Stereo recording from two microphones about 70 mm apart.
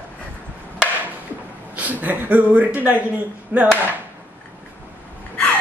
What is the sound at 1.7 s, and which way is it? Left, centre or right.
A man's voice, right.